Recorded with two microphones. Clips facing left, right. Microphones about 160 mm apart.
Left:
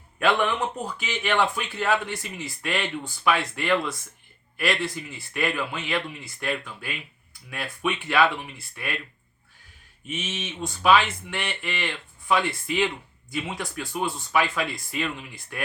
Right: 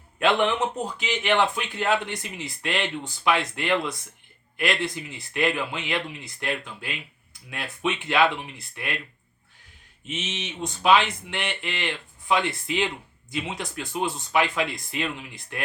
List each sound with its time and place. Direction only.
0.2 s speech: 20° right (ahead or behind)
10.1 s speech: 20° right (ahead or behind)